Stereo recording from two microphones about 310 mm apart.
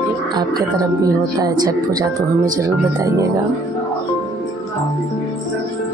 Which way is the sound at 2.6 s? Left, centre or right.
Centre.